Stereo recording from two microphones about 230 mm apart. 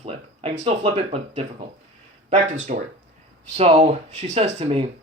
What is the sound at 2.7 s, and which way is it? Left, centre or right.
Speech, right.